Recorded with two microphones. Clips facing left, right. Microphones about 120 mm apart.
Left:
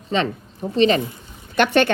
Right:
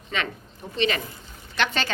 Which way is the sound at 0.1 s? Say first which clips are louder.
Left 8 dB; 30° left (ahead or behind).